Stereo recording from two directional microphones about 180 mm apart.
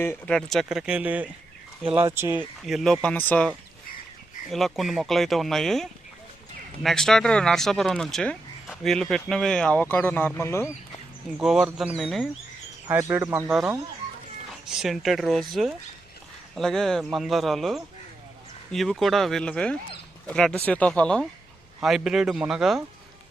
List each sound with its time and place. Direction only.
0.0 s speech: 10° left (ahead or behind); by 1.3 s 10° right (ahead or behind)
1.8 s speech: 30° right (ahead or behind)
2.1 s speech: 10° right (ahead or behind); by 3.5 s 10° left (ahead or behind)
4.5 s speech: centre (ahead or behind)
11.3 s speech: 5° right (ahead or behind)
12.9 s speech: 10° right (ahead or behind)
14.7 s speech: centre (ahead or behind)